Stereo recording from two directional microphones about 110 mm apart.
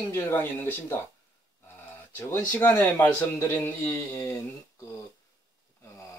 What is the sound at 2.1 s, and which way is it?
Speech, 20° left (ahead or behind).